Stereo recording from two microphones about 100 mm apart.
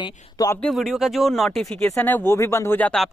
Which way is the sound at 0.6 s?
Centre (ahead or behind).